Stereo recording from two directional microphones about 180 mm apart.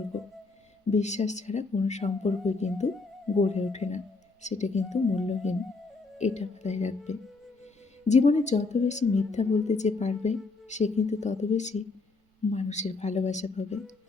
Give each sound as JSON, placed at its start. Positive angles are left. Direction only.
{"t": 0.9, "sound": "a woman's voice", "side_deg": 40}